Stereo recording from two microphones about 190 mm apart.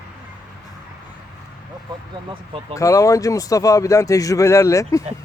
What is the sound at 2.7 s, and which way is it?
Speech, 15° left (ahead or behind).